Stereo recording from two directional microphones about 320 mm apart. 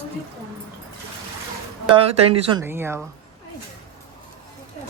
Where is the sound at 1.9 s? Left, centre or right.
Centre.